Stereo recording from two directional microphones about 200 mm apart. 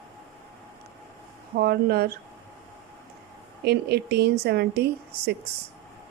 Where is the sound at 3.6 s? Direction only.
55° right (ahead or behind).